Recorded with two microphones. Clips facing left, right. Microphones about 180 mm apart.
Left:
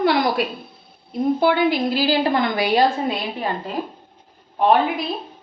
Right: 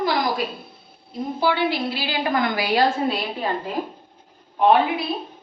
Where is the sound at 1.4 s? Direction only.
50° left (ahead or behind); by 3.1 s 20° left (ahead or behind).